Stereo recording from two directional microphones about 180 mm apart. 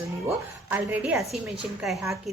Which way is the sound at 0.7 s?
10° right (ahead or behind).